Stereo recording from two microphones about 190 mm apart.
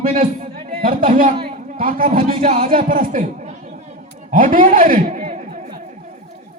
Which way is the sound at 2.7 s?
45° right (ahead or behind).